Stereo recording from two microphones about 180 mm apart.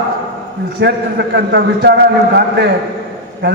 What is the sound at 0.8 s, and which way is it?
A man's voice, 70° right (ahead or behind).